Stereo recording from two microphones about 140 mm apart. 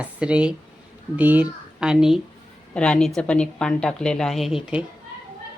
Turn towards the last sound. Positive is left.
turn(degrees=-5)  # may be behind; listen again after turning